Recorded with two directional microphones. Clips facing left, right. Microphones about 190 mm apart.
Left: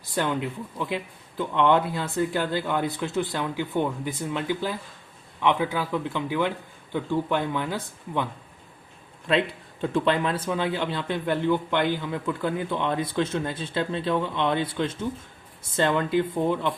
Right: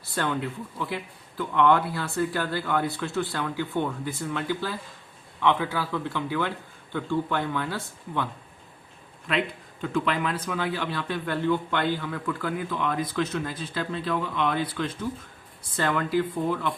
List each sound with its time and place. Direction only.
0.0 s a man's voice: 15° left (ahead or behind)
9.3 s a man's voice: 30° left (ahead or behind)